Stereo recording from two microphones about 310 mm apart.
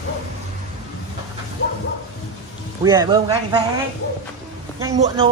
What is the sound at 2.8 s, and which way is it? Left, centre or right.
Speech, centre.